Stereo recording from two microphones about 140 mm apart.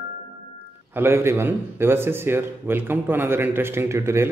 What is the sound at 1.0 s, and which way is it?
A man's voice, 20° right (ahead or behind).